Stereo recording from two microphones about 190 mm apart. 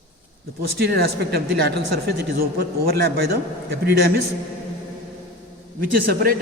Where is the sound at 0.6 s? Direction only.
55° right (ahead or behind).